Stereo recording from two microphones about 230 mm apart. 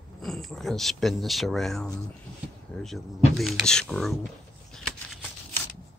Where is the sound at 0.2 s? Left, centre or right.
Centre.